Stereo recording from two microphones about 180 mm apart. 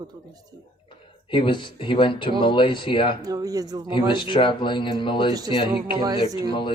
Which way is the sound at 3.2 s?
20° right (ahead or behind).